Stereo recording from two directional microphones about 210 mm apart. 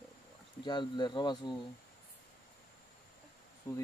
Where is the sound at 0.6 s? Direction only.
20° left (ahead or behind).